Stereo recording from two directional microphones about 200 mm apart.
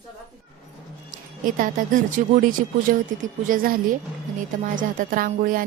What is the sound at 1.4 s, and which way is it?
Speech, 40° right (ahead or behind).